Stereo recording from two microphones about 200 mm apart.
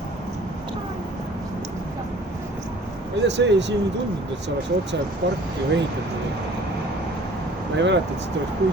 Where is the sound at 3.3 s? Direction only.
60° right (ahead or behind).